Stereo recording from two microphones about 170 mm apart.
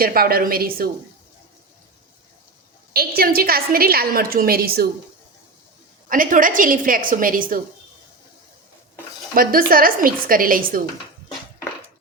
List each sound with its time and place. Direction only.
0.0 s a woman's voice: 60° right (ahead or behind)
2.9 s a woman's voice: 65° right (ahead or behind)
6.1 s a woman's voice: 55° right (ahead or behind)
9.3 s a woman's voice: 55° right (ahead or behind)